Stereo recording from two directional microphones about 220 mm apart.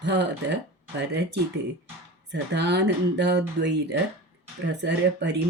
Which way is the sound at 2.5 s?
50° right (ahead or behind).